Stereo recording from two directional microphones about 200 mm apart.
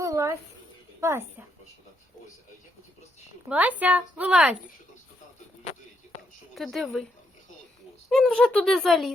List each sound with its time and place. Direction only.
0.0 s a sound: 15° right (ahead or behind)
1.0 s a woman's voice: 10° right (ahead or behind)
3.5 s a woman's voice: 10° right (ahead or behind)
6.5 s speech: centre (ahead or behind)
8.1 s speech: centre (ahead or behind)